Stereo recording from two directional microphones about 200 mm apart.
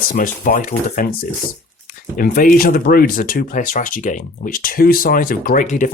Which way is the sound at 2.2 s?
45° left (ahead or behind).